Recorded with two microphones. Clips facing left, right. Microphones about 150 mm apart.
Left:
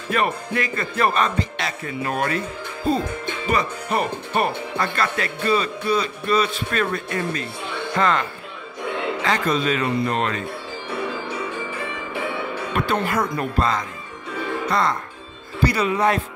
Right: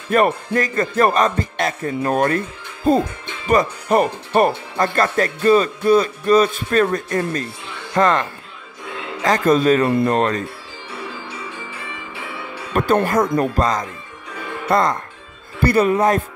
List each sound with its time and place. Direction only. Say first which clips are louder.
0.1 s speech: right 6 dB; 45° right (ahead or behind)
9.2 s speech: right 8 dB; 45° right (ahead or behind)
12.7 s speech: right 6 dB; 45° right (ahead or behind)